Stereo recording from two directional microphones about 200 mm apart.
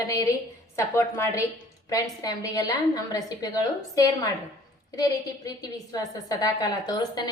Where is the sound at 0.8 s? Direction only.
15° left (ahead or behind).